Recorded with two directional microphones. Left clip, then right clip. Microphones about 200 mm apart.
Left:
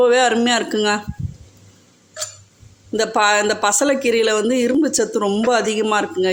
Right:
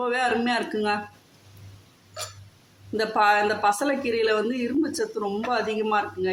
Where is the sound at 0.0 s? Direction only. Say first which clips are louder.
Left 10 dB; 45° left (ahead or behind).